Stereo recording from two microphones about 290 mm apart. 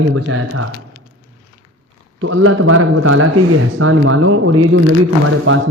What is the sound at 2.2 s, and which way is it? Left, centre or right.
Speech, right.